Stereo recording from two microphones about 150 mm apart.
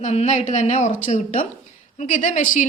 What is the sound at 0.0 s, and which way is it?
A woman's voice, 50° left (ahead or behind).